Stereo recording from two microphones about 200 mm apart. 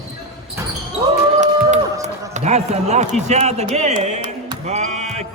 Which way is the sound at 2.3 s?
35° right (ahead or behind).